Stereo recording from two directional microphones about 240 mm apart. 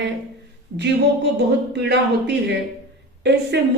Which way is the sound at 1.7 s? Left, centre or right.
Right.